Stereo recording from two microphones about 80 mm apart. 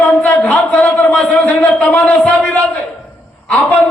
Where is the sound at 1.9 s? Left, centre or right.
Left.